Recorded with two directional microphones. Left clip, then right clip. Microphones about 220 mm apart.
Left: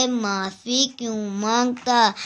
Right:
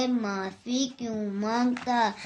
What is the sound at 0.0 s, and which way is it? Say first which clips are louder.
Speech: left 6 dB; 45° left (ahead or behind).